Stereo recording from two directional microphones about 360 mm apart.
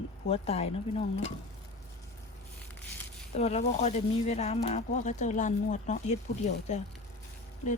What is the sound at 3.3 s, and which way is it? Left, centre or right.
Speech, centre.